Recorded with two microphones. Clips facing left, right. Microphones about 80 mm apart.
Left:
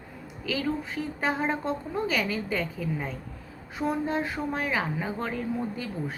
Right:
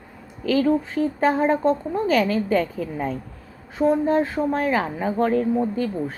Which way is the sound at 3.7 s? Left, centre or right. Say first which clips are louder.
Right 9 dB; right.